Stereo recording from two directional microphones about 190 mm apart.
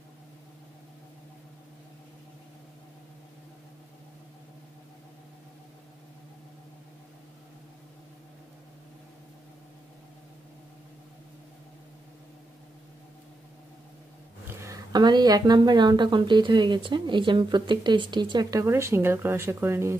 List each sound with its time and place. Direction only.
14.5 s speech: 15° right (ahead or behind)